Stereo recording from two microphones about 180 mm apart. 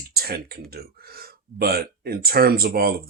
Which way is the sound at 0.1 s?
60° right (ahead or behind).